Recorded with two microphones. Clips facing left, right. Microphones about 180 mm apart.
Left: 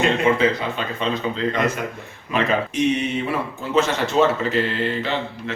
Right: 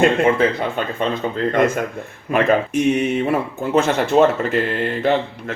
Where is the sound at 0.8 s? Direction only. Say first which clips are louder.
Right 3 dB; 50° right (ahead or behind).